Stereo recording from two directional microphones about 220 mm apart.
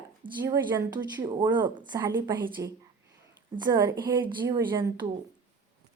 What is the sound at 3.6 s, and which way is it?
A woman's voice, 15° right (ahead or behind).